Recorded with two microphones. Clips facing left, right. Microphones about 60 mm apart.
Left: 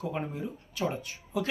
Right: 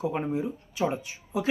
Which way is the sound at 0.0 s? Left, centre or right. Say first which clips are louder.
Right 6 dB; centre.